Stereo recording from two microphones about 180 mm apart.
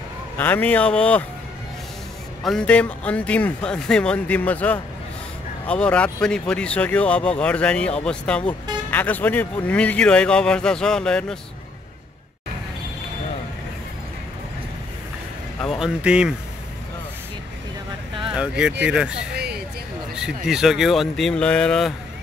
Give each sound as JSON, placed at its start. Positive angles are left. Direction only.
{"t": 0.4, "sound": "speech", "side_deg": 10}
{"t": 2.4, "sound": "a man's voice", "side_deg": 5}
{"t": 15.6, "sound": "speech", "side_deg": 0}
{"t": 18.9, "sound": "a man's voice", "side_deg": -5}
{"t": 19.3, "sound": "a sound", "side_deg": -65}
{"t": 20.2, "sound": "a man's voice", "side_deg": -5}